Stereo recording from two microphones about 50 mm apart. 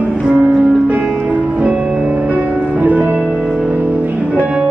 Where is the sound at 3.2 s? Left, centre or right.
Centre.